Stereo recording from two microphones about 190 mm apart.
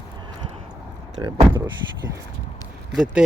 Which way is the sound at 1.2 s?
25° right (ahead or behind).